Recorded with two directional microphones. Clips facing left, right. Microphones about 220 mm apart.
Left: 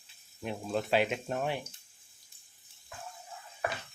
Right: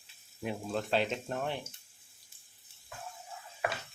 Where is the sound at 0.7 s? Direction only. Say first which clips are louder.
Left 3 dB; 10° left (ahead or behind).